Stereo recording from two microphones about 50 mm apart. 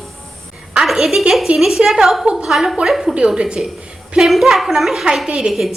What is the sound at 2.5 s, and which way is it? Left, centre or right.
Speech, centre.